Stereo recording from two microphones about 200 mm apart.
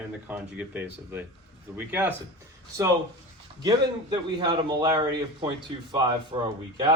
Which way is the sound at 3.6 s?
20° right (ahead or behind).